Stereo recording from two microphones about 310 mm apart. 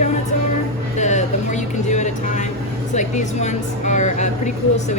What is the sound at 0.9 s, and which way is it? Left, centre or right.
Vehicle, left.